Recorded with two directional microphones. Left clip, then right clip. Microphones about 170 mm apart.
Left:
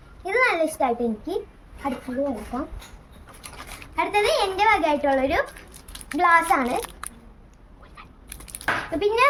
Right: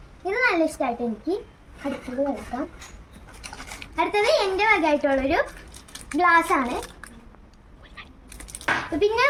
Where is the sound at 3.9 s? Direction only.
30° left (ahead or behind).